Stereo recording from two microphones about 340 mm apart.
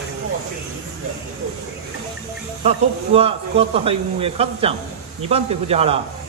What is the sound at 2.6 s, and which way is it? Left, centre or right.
Speech, centre.